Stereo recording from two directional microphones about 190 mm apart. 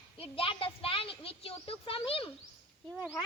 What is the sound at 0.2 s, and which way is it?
A child's voice, 30° left (ahead or behind).